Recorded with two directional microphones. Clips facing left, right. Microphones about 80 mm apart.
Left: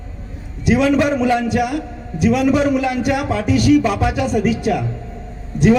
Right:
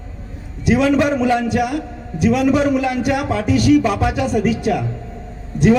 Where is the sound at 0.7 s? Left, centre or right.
Right.